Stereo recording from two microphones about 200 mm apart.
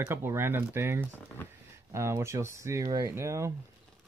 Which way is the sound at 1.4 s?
10° left (ahead or behind).